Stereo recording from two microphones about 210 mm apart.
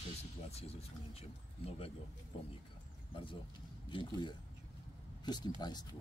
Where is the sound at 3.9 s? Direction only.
20° left (ahead or behind).